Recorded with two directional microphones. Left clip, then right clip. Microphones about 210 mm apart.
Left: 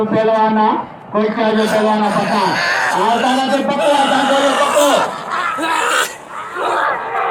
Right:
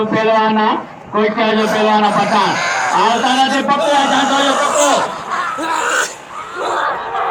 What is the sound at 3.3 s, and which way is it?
Speech, 20° right (ahead or behind).